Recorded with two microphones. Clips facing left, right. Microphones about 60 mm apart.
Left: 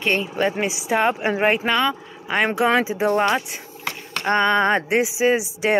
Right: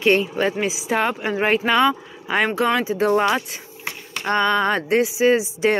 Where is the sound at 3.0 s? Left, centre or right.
Centre.